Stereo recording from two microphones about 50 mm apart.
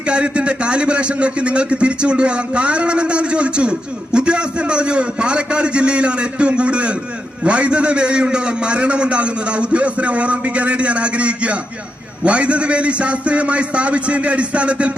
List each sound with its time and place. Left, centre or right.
0.1 s a man's voice: right